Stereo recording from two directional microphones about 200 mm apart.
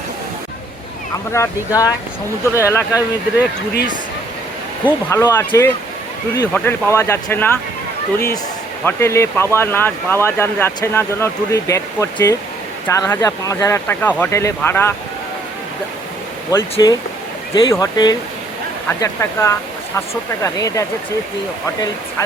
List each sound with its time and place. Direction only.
1.3 s speech: 15° left (ahead or behind)
5.1 s speech: 15° left (ahead or behind)
8.8 s speech: 10° left (ahead or behind)
16.5 s speech: 15° left (ahead or behind)